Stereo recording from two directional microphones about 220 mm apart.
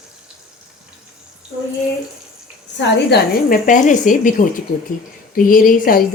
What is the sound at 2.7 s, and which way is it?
A woman's voice, 45° left (ahead or behind).